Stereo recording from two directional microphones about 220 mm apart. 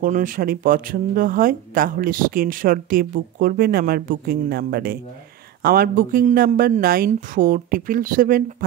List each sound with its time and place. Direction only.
0.0 s speech: 35° right (ahead or behind)